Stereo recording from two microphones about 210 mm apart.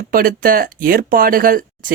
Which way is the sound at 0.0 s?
45° right (ahead or behind).